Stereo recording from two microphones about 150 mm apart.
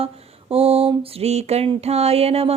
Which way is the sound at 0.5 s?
40° right (ahead or behind).